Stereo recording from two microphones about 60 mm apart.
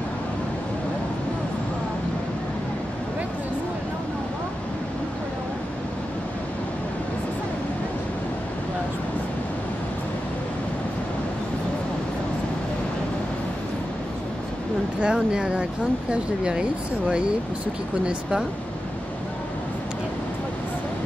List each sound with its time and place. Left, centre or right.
15.0 s speech: centre